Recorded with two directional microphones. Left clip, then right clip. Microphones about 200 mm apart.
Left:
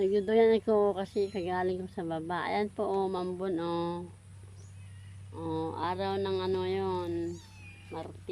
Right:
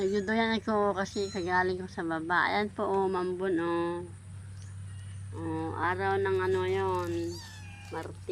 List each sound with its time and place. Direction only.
0.0 s speech: 15° left (ahead or behind)
5.3 s speech: 20° left (ahead or behind)
7.9 s speech: 10° left (ahead or behind)